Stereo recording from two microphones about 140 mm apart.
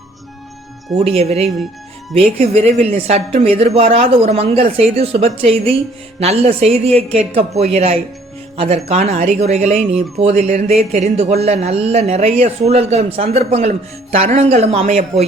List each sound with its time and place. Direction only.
0.9 s a woman's voice: 45° right (ahead or behind)